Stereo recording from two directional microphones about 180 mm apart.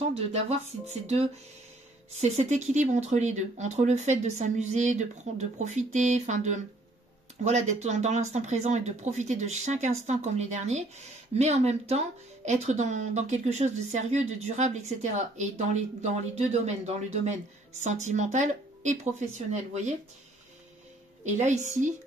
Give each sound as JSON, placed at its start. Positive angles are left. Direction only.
{"t": 0.3, "sound": "speech", "side_deg": -35}
{"t": 21.2, "sound": "speech", "side_deg": -40}